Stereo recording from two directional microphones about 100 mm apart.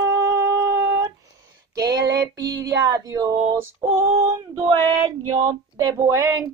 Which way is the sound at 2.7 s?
35° right (ahead or behind).